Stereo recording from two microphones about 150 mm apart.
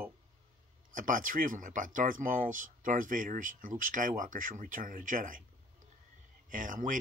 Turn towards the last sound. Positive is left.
turn(degrees=-60)  # may be behind; listen again after turning